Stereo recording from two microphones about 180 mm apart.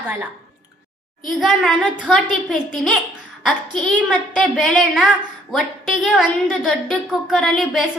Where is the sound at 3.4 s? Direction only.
5° left (ahead or behind).